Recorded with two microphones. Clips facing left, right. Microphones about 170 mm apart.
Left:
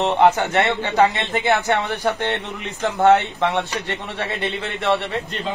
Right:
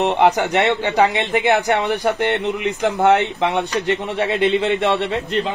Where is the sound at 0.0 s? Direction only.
15° right (ahead or behind).